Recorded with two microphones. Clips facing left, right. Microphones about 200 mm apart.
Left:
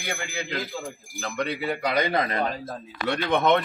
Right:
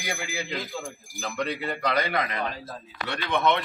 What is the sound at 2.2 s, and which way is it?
A man's voice, 40° left (ahead or behind).